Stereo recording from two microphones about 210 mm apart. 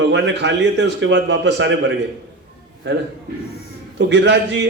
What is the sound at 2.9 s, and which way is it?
A man's voice, 55° right (ahead or behind).